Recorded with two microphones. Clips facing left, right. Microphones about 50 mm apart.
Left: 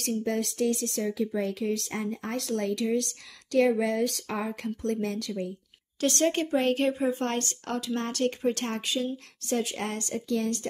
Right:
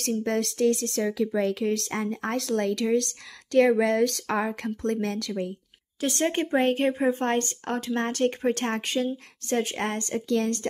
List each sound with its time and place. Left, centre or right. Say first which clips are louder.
0.0 s speech: right 2 dB; right
2.5 s speech: right 3 dB; right
3.5 s speech: right 4 dB; right
5.9 s speech: even; centre; by 10.1 s right
10.1 s speech: right 3 dB; right